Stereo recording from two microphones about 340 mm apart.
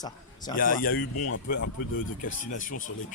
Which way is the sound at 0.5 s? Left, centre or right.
Left.